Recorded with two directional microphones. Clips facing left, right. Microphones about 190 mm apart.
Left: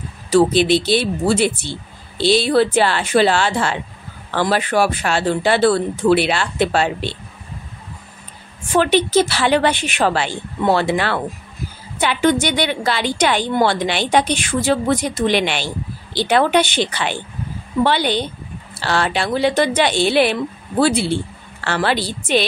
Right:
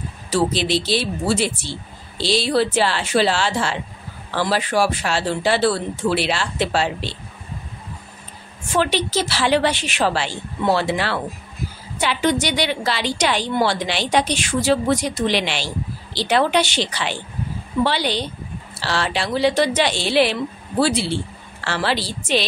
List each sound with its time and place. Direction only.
0.3 s a woman's voice: 55° left (ahead or behind)
8.7 s a woman's voice: 55° left (ahead or behind)